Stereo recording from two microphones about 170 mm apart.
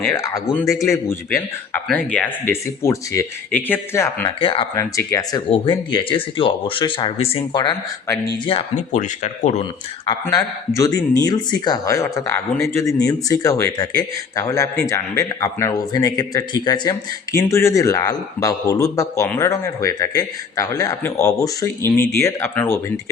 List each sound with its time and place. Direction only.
0.1 s speech: 20° left (ahead or behind)
4.4 s speech: 30° left (ahead or behind)
4.7 s speech: 15° left (ahead or behind)
5.5 s speech: 30° left (ahead or behind)
8.4 s speech: 40° left (ahead or behind)
10.8 s speech: 20° left (ahead or behind)